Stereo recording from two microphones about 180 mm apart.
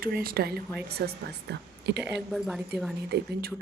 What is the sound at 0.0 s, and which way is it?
A woman's voice, 55° right (ahead or behind).